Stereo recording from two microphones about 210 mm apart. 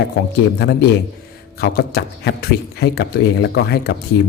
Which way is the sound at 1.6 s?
50° left (ahead or behind).